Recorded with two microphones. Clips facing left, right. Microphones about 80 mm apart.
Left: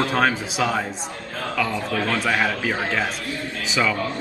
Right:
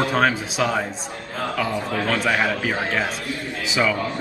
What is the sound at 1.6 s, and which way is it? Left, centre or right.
Speech, right.